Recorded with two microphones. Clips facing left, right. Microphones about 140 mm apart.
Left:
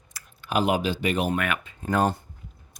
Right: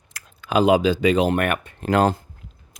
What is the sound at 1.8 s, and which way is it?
Speech, 90° right.